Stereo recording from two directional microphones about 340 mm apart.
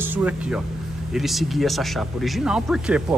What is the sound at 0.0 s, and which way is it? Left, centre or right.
Speech, centre.